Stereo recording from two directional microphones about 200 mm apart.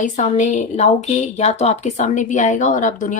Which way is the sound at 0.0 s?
40° left (ahead or behind).